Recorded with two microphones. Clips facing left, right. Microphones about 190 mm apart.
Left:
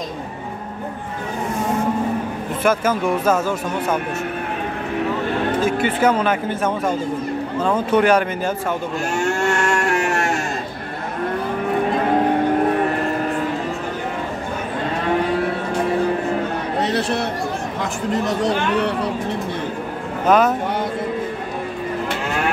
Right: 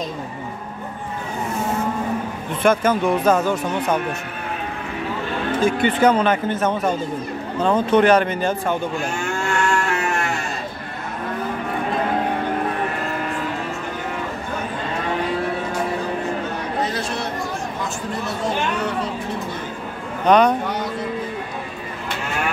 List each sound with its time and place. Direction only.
2.6 s speech: 5° left (ahead or behind)
5.6 s speech: 5° left (ahead or behind)
9.2 s livestock: 40° left (ahead or behind)
16.8 s chatter: 70° left (ahead or behind)
20.2 s speech: 5° left (ahead or behind)